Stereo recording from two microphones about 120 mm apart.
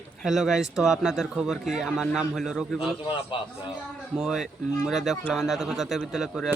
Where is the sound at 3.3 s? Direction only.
45° left (ahead or behind).